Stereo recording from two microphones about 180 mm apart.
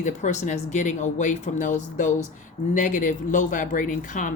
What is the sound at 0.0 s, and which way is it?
Speech, 45° left (ahead or behind).